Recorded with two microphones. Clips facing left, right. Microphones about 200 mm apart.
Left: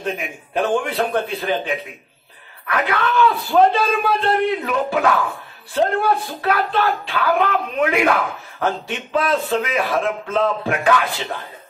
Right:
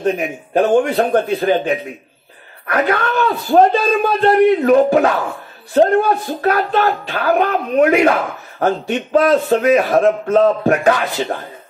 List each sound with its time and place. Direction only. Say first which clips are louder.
0.0 s a man's voice: right 8 dB; 45° right (ahead or behind)
2.6 s a man's voice: right 4 dB; 45° right (ahead or behind)